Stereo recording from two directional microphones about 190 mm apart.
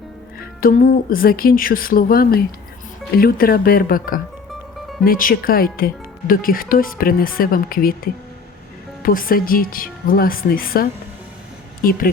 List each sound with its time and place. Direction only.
0.6 s speech: 45° left (ahead or behind)